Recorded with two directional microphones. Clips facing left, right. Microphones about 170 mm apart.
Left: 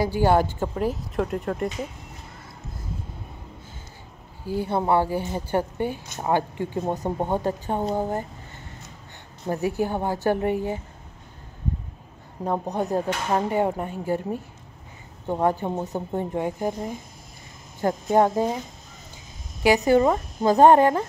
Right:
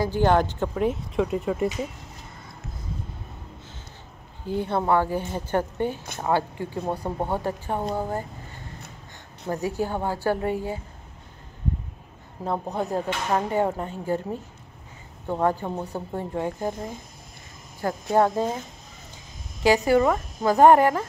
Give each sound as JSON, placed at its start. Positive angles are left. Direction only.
{"t": 0.0, "sound": "a woman's voice", "side_deg": 10}
{"t": 4.5, "sound": "speech", "side_deg": 5}
{"t": 9.7, "sound": "speech", "side_deg": 15}
{"t": 12.4, "sound": "speech", "side_deg": 15}
{"t": 17.7, "sound": "speech", "side_deg": 20}
{"t": 19.9, "sound": "speech", "side_deg": 25}